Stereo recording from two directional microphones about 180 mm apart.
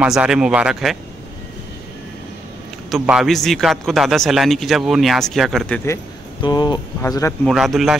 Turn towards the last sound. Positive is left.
turn(degrees=0)  # may be behind; listen again after turning